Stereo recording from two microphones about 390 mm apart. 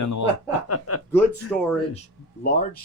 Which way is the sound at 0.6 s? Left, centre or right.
Left.